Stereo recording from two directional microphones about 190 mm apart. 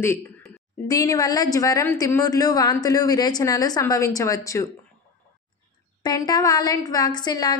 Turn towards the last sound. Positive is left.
turn(degrees=20)  # may be behind; listen again after turning